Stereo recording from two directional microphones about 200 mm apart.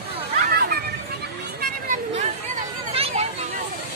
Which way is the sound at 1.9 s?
35° right (ahead or behind).